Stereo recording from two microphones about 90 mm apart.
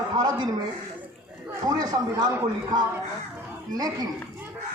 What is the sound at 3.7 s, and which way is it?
Speech, 45° right (ahead or behind).